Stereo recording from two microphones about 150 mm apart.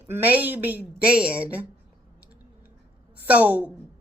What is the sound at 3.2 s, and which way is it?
Speech, 10° right (ahead or behind).